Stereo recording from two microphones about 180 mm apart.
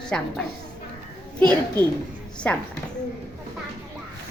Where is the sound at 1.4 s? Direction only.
10° left (ahead or behind).